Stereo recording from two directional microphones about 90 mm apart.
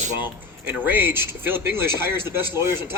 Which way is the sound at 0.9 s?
20° right (ahead or behind).